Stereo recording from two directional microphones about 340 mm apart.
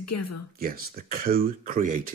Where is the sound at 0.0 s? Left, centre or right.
Left.